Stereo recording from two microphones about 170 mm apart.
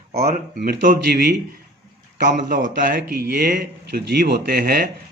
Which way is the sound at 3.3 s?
65° right (ahead or behind).